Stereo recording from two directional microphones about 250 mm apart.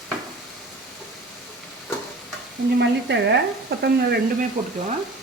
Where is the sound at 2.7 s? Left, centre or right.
Right.